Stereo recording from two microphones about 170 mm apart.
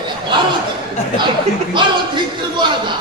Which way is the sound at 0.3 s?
25° right (ahead or behind).